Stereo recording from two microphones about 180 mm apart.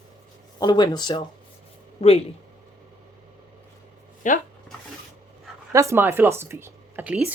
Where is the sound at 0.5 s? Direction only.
25° left (ahead or behind).